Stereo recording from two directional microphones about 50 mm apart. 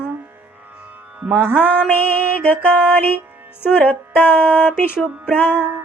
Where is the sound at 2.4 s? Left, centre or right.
Left.